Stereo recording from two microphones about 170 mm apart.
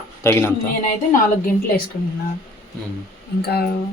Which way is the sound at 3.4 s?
70° left (ahead or behind).